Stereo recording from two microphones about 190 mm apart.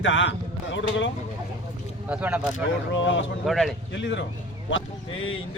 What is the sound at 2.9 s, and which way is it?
Speech, 80° left.